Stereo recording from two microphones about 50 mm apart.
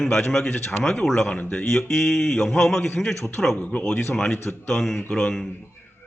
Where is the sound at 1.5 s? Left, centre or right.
Centre.